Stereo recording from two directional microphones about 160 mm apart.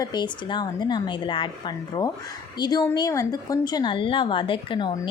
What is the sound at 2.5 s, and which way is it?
A woman's voice, 25° left (ahead or behind).